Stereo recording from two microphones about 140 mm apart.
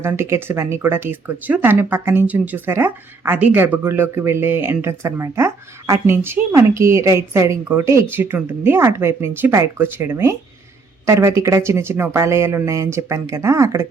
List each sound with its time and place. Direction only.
0.0 s speech: 20° right (ahead or behind)